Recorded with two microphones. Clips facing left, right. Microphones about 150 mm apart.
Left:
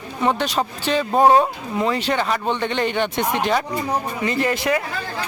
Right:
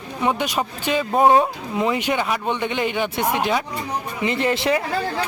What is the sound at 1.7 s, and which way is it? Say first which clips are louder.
Speech: even; 15° right (ahead or behind).